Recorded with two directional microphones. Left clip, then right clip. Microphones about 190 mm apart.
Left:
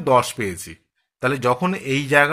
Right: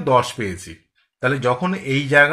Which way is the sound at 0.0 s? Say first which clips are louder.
Even; 45° left (ahead or behind).